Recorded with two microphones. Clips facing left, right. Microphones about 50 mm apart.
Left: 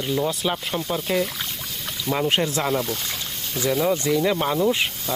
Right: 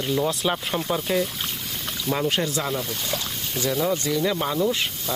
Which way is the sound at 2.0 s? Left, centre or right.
Centre.